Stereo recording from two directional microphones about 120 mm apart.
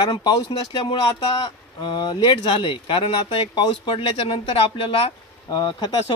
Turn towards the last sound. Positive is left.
turn(degrees=35)  # may be behind; listen again after turning